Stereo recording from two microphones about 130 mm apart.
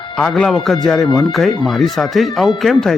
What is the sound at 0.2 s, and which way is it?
A man's voice, 5° left (ahead or behind).